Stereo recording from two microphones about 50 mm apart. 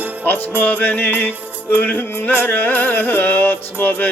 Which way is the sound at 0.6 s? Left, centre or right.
Left.